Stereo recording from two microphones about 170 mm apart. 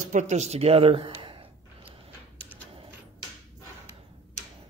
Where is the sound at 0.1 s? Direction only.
45° right (ahead or behind).